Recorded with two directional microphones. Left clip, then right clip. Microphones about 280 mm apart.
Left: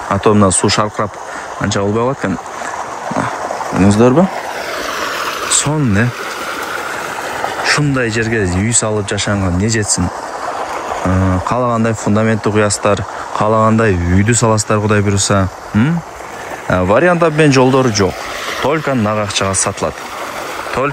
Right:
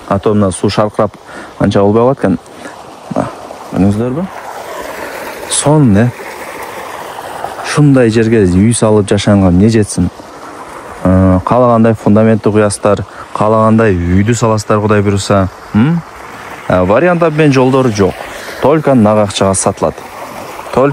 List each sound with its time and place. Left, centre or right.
0.1 s speech: centre
5.6 s speech: centre
7.6 s speech: centre
11.1 s speech: centre
18.6 s speech: centre